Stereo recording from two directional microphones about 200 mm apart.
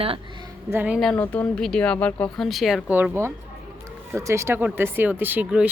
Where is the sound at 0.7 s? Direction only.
5° right (ahead or behind).